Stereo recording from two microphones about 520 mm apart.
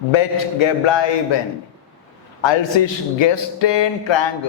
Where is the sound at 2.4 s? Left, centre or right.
Left.